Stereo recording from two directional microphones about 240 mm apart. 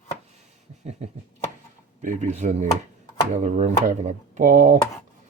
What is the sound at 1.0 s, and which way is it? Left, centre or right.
Speech, right.